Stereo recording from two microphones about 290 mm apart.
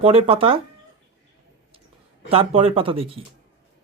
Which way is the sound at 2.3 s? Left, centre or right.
Centre.